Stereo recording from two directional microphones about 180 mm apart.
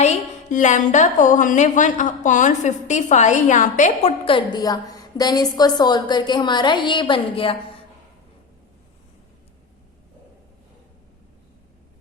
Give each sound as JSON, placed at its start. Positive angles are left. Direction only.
{"t": 0.0, "sound": "a woman's voice", "side_deg": 40}
{"t": 4.5, "sound": "a woman's voice", "side_deg": 20}